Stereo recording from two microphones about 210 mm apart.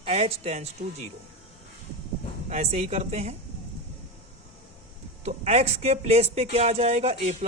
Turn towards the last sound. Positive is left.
turn(degrees=-30)  # may be behind; listen again after turning